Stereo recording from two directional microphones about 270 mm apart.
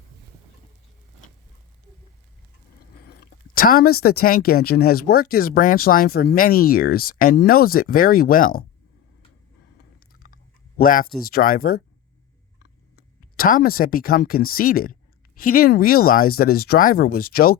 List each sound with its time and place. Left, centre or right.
3.1 s speech: left
10.2 s a sound: left
11.3 s speech: left
13.3 s speech: left